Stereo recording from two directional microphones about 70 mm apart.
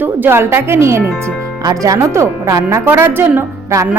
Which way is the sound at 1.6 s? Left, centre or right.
Right.